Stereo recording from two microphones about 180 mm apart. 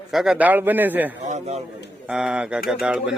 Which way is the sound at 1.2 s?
40° right (ahead or behind).